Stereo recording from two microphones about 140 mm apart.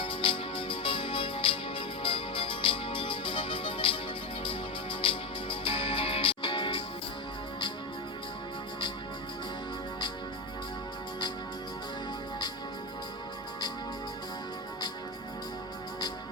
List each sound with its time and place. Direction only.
0.0 s music: 40° left (ahead or behind)